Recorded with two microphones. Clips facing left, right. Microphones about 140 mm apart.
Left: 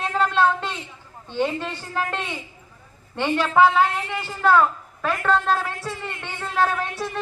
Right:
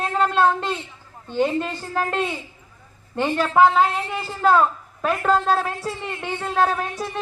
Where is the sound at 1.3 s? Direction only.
35° right (ahead or behind).